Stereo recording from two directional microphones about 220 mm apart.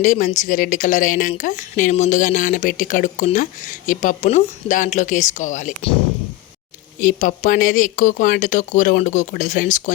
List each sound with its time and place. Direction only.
0.0 s a woman's voice: 35° left (ahead or behind)
7.0 s a woman's voice: 35° left (ahead or behind)